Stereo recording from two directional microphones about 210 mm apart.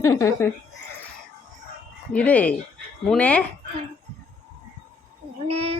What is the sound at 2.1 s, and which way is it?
Speech, 5° left (ahead or behind).